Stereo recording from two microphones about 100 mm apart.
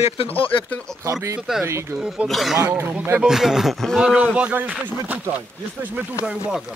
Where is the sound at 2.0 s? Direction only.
5° right (ahead or behind).